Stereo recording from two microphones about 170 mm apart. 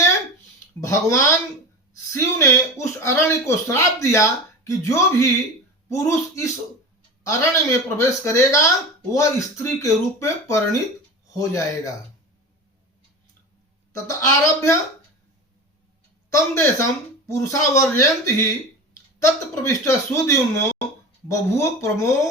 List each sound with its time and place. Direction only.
0.8 s speech: 20° left (ahead or behind)
14.1 s speech: 20° left (ahead or behind)
16.3 s speech: 15° left (ahead or behind)
19.2 s speech: 15° left (ahead or behind)